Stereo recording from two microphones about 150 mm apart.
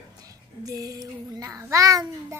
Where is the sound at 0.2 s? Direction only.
25° right (ahead or behind).